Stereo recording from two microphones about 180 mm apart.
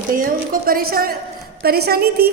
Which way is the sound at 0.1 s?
50° right (ahead or behind).